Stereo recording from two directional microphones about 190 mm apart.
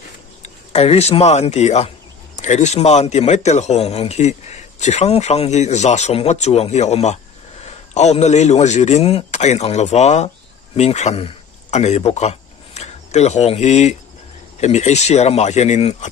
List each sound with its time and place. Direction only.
0.4 s a man's voice: 35° left (ahead or behind)